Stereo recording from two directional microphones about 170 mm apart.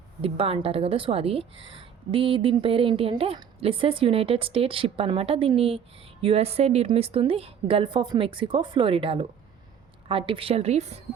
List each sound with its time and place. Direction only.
0.2 s a woman's voice: 35° right (ahead or behind)